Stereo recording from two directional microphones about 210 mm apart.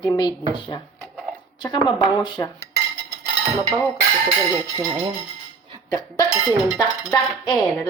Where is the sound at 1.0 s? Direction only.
5° left (ahead or behind).